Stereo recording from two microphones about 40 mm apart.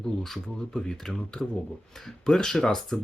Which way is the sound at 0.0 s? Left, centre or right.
Centre.